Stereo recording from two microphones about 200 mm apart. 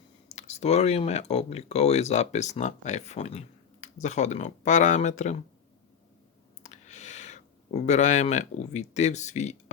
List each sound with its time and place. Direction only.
0.3 s speech: 30° left (ahead or behind)
6.6 s speech: 35° left (ahead or behind)